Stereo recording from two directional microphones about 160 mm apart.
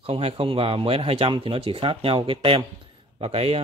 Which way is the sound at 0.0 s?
35° right (ahead or behind).